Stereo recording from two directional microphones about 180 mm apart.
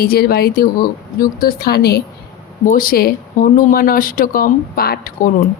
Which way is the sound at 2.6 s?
50° left (ahead or behind).